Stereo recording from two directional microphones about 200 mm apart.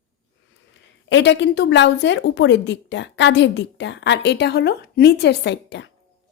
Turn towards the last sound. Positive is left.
turn(degrees=60)  # may be behind; listen again after turning